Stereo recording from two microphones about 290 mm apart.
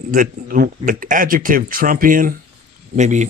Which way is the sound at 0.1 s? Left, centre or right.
Right.